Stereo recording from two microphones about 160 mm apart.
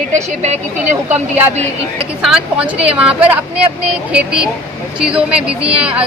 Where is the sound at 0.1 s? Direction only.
45° right (ahead or behind).